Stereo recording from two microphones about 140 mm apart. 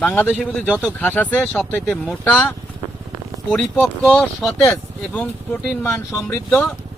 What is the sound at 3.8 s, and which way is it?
Speech, 5° left (ahead or behind).